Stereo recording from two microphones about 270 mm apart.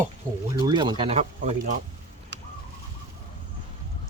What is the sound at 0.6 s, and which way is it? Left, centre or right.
Speech, centre.